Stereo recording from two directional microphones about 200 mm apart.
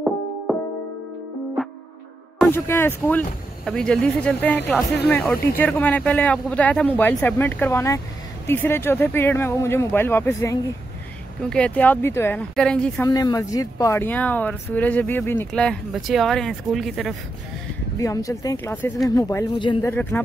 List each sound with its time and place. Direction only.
1.6 s music: centre (ahead or behind)
2.4 s speech: 10° left (ahead or behind)
13.0 s speech: 15° left (ahead or behind); by 17.1 s centre (ahead or behind)
17.9 s speech: 15° left (ahead or behind)
19.9 s speech: 10° left (ahead or behind)